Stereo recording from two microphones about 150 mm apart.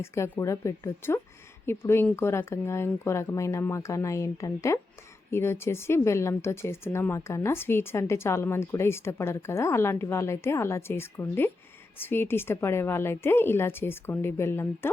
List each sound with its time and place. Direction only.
0.0 s speech: 15° left (ahead or behind)